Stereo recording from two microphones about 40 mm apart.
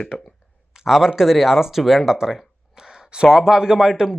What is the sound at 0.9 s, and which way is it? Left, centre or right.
Speech, centre.